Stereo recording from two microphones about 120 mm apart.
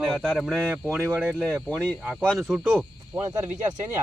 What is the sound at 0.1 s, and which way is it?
Speech, centre (ahead or behind).